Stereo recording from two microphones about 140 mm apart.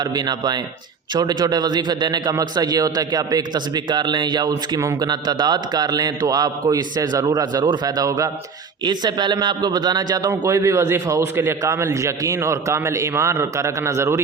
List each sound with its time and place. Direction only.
0.0 s a man's voice: 30° right (ahead or behind)